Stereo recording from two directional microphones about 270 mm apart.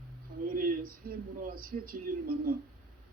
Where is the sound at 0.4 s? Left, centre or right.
Right.